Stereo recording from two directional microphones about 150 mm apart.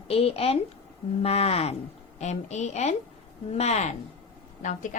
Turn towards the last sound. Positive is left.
turn(degrees=55)  # may be behind; listen again after turning